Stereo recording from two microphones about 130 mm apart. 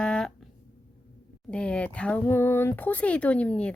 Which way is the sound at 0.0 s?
5° left (ahead or behind).